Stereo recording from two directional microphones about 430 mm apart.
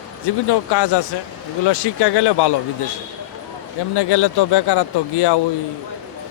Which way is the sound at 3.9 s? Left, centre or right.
Left.